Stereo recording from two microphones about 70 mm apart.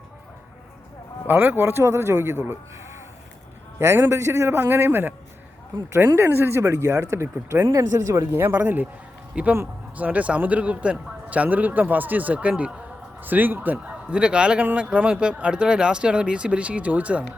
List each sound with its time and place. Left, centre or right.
1.3 s speech: right
4.1 s speech: right
6.1 s speech: right
7.7 s speech: right
8.3 s speech: right
13.7 s speech: centre